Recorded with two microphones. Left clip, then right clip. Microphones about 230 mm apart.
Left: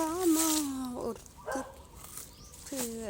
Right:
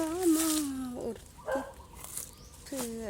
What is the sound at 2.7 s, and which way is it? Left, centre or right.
Speech, centre.